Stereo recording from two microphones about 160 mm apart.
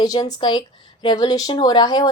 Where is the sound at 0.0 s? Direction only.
25° left (ahead or behind).